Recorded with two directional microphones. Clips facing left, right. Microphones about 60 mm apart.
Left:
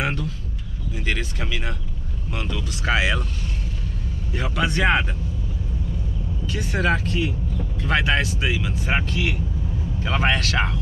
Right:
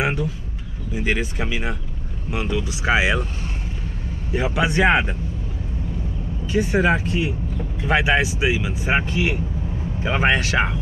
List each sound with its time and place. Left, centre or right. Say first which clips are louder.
0.0 s a sound: right 3 dB; centre
0.9 s speech: right 5 dB; centre
4.3 s speech: right 4 dB; centre
6.4 s speech: right 5 dB; centre